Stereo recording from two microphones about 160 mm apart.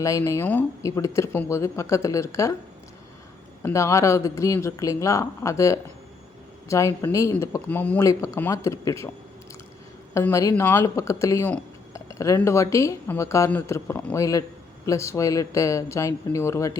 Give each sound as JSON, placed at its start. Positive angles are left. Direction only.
{"t": 0.0, "sound": "speech", "side_deg": 20}
{"t": 3.6, "sound": "speech", "side_deg": 20}
{"t": 10.2, "sound": "speech", "side_deg": 20}